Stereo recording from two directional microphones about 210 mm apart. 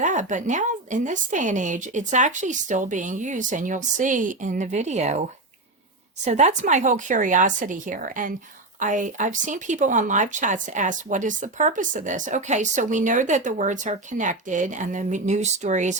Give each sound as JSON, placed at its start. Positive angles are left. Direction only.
{"t": 0.0, "sound": "speech", "side_deg": -35}
{"t": 6.2, "sound": "speech", "side_deg": -35}